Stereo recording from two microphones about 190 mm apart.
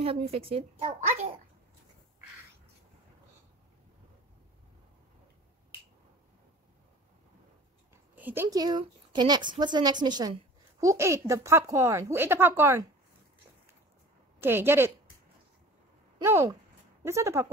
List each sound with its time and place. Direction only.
0.0 s speech: 30° right (ahead or behind)
7.9 s a woman's voice: 10° right (ahead or behind)
14.4 s speech: 10° right (ahead or behind)
16.2 s speech: 15° right (ahead or behind)